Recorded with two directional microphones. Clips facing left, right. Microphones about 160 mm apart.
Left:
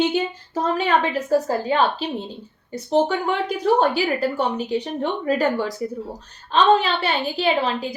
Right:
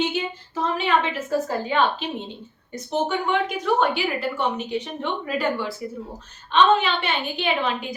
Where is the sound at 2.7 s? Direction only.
35° left (ahead or behind).